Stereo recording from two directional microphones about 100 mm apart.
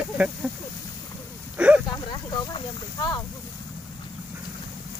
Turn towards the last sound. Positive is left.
turn(degrees=45)  # may be behind; listen again after turning